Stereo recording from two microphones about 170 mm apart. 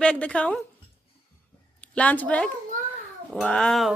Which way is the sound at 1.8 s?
10° left (ahead or behind).